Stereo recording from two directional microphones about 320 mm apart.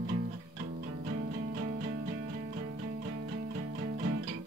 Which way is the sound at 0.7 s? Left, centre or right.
Right.